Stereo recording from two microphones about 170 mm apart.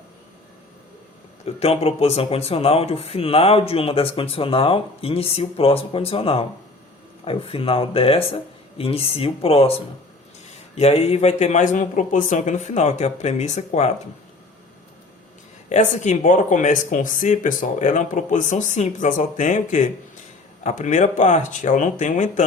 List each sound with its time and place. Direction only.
1.5 s speech: 35° left (ahead or behind)
10.8 s speech: 40° left (ahead or behind)
15.7 s speech: 45° left (ahead or behind)